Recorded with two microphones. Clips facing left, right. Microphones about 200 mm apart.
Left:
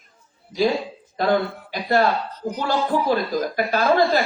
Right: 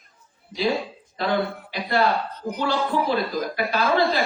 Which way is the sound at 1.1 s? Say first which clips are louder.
Left 5 dB; 45° left (ahead or behind).